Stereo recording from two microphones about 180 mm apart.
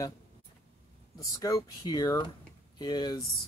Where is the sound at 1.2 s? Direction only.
20° left (ahead or behind).